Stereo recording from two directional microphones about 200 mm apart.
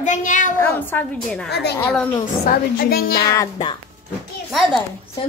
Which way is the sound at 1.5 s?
55° left (ahead or behind).